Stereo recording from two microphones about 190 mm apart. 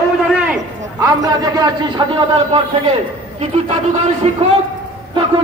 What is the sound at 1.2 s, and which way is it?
Speech, 20° right (ahead or behind).